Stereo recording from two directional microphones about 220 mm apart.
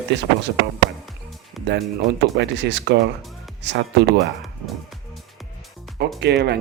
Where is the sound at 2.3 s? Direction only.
50° right (ahead or behind).